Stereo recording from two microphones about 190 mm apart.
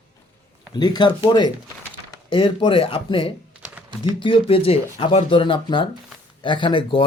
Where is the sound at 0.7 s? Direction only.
20° left (ahead or behind).